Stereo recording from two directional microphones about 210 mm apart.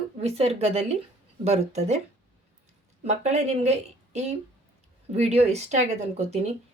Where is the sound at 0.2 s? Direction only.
30° right (ahead or behind).